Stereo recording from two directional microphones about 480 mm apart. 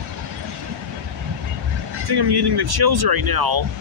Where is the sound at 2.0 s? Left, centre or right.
Right.